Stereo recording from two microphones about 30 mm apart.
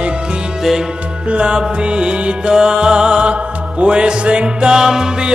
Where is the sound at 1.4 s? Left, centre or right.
Right.